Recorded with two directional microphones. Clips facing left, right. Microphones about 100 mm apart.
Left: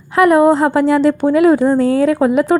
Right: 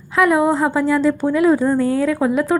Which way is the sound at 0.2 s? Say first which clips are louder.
Left 5 dB; 60° left (ahead or behind).